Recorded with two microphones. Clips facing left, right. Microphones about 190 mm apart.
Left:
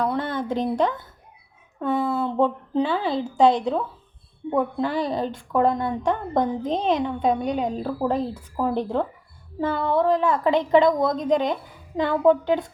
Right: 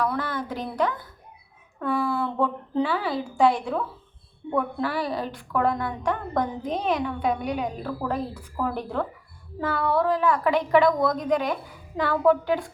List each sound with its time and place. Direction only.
0.0 s a woman's voice: 25° left (ahead or behind)